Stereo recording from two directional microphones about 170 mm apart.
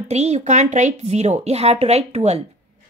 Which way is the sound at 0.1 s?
40° right (ahead or behind).